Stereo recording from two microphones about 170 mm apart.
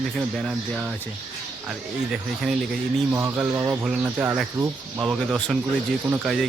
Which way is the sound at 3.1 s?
15° right (ahead or behind).